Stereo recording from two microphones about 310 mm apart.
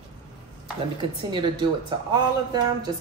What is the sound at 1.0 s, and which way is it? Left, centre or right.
Speech, centre.